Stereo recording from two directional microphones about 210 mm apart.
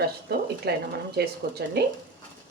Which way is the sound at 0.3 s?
50° right (ahead or behind).